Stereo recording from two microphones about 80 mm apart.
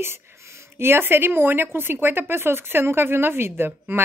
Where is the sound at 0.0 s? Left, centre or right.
Right.